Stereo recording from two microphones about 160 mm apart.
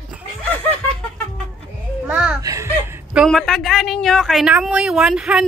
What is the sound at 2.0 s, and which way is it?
Music, 10° right (ahead or behind).